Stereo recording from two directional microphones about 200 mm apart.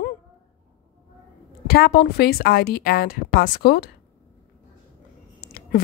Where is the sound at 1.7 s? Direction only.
50° left (ahead or behind).